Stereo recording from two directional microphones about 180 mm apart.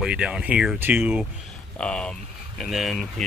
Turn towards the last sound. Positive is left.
turn(degrees=0)  # may be behind; listen again after turning